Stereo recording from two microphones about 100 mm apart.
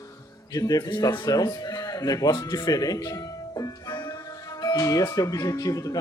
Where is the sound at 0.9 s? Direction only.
50° left (ahead or behind).